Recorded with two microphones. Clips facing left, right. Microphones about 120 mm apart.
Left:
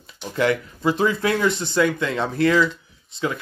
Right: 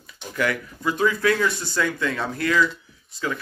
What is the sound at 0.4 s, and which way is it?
Speech, 25° left (ahead or behind).